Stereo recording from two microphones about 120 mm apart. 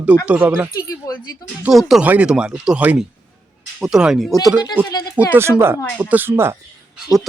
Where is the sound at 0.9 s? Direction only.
30° left (ahead or behind).